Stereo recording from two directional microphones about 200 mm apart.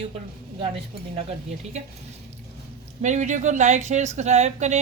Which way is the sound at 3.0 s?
35° right (ahead or behind).